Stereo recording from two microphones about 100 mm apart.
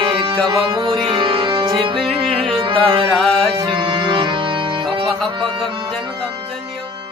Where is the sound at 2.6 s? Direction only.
55° right (ahead or behind).